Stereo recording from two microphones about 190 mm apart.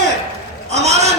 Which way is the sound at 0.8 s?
35° right (ahead or behind).